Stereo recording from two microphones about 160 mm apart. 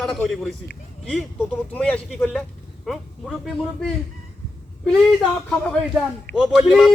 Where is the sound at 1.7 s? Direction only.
5° left (ahead or behind).